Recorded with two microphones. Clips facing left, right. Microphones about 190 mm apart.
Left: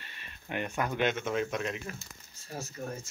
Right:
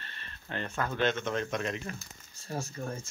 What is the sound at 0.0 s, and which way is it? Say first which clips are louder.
Speech: right 1 dB; 10° left (ahead or behind).